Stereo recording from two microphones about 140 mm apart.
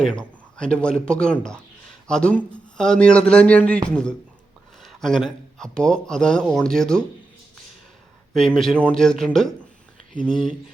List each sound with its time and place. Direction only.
0.2 s speech: 5° left (ahead or behind)
8.3 s speech: 5° left (ahead or behind)